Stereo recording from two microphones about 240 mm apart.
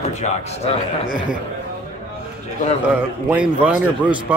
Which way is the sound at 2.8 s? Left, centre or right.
Centre.